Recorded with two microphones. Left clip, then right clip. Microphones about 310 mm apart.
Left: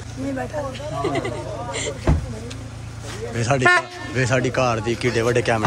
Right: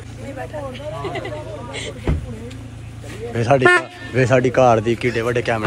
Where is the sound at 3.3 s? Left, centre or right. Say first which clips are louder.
Right 3 dB; centre.